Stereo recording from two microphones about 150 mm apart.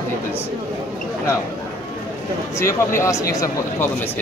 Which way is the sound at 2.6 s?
20° left (ahead or behind).